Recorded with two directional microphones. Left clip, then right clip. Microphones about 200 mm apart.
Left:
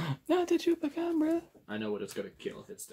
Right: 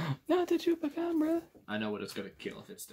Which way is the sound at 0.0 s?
5° left (ahead or behind).